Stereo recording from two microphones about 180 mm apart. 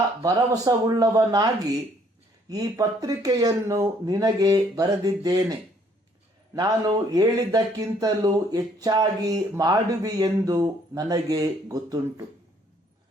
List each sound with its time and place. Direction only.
0.2 s speech: 20° right (ahead or behind)
2.5 s speech: 20° right (ahead or behind)